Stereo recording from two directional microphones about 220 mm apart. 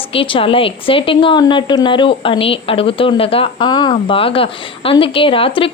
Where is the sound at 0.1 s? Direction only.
25° left (ahead or behind).